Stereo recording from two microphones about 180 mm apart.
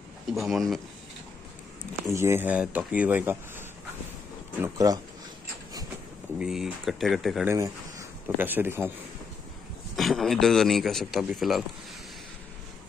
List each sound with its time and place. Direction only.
0.3 s a man's voice: centre (ahead or behind)
2.0 s speech: 15° right (ahead or behind)
6.3 s a man's voice: 5° right (ahead or behind)
7.4 s speech: 15° right (ahead or behind)
9.9 s a man's voice: centre (ahead or behind)